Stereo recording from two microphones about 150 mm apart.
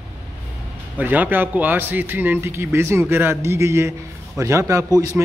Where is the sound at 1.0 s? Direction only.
10° right (ahead or behind).